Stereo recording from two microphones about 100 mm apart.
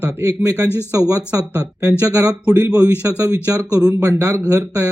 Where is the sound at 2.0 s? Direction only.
35° right (ahead or behind).